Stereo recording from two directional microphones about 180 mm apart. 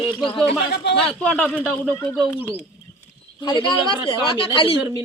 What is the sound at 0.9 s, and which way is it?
Speech, 65° left (ahead or behind).